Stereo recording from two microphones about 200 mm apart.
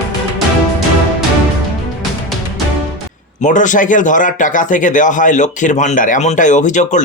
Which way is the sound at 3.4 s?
40° left (ahead or behind).